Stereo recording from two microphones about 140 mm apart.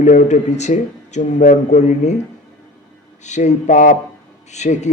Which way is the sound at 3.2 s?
55° left (ahead or behind).